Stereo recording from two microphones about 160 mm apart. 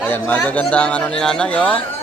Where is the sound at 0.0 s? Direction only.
10° left (ahead or behind).